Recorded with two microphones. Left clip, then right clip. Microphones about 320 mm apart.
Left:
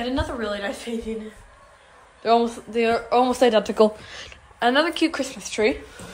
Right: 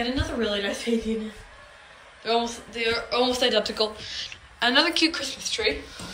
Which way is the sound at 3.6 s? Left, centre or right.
Left.